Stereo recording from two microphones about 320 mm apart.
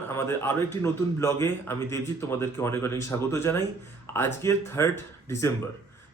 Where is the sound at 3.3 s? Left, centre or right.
Centre.